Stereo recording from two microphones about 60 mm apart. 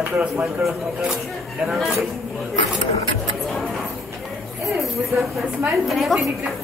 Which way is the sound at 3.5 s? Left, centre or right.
Centre.